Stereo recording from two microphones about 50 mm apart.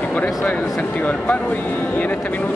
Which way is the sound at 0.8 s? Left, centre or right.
Left.